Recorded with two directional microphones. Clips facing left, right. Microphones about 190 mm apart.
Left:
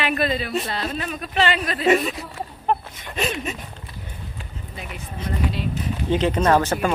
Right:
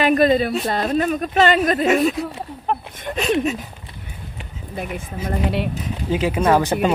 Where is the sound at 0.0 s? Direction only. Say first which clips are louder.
Right 8 dB; 40° right (ahead or behind).